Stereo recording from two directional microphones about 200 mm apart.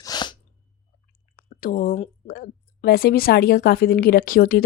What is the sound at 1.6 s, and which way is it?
A woman's voice, 45° left (ahead or behind).